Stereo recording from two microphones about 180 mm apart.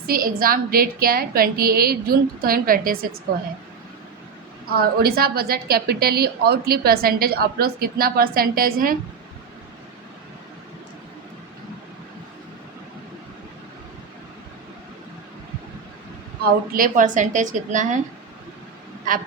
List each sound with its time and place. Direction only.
0.1 s a woman's voice: 55° right (ahead or behind)
4.8 s a woman's voice: 60° right (ahead or behind)
16.4 s a woman's voice: 55° right (ahead or behind)